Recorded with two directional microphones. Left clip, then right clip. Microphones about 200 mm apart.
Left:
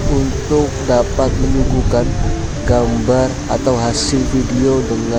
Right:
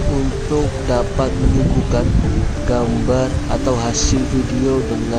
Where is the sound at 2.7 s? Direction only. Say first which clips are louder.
Left 4 dB; 25° left (ahead or behind).